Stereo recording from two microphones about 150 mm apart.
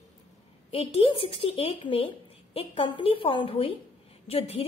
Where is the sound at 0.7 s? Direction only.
40° left (ahead or behind).